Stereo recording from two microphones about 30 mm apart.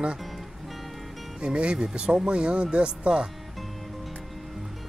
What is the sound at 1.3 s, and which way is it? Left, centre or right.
Speech, right.